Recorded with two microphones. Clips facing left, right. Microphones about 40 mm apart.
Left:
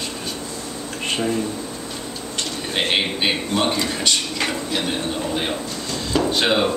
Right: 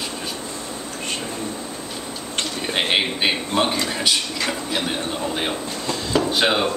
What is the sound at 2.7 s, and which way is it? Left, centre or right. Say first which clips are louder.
A man's voice: even; centre.